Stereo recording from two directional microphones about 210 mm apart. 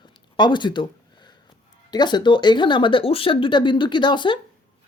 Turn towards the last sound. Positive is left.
turn(degrees=20)  # may be behind; listen again after turning